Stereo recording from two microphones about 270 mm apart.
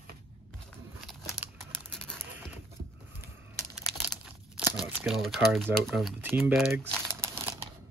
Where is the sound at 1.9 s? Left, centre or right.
Centre.